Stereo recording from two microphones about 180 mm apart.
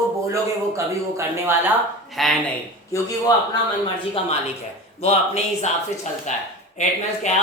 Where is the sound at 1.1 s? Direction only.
15° right (ahead or behind).